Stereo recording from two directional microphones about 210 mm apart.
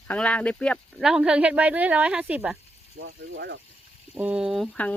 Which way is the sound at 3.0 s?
60° right (ahead or behind).